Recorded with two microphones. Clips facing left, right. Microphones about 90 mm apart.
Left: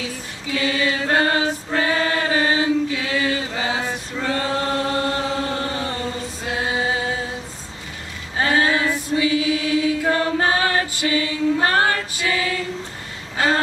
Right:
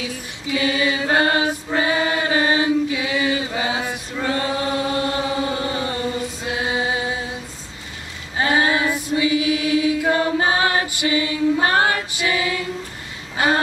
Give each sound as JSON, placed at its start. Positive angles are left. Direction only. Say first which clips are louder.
{"t": 0.0, "sound": "mantra", "louder": "right 1 dB", "side_deg": -15}
{"t": 5.0, "sound": "chant", "louder": "right 1 dB", "side_deg": -15}
{"t": 6.9, "sound": "music", "louder": "even", "side_deg": -15}
{"t": 8.4, "sound": "chant", "louder": "even", "side_deg": -15}